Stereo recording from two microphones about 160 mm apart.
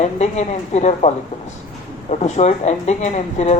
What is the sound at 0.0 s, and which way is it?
A man's voice, 45° left (ahead or behind).